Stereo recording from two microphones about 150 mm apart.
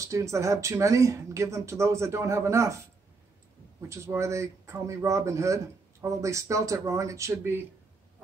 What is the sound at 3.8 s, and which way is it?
Speech, 20° right (ahead or behind).